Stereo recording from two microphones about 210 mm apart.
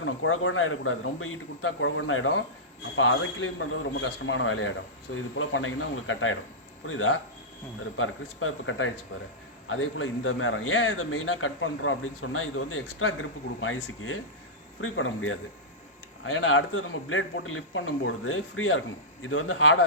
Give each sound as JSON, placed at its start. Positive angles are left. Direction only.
{"t": 0.0, "sound": "a man's voice", "side_deg": 65}
{"t": 13.6, "sound": "a man's voice", "side_deg": 65}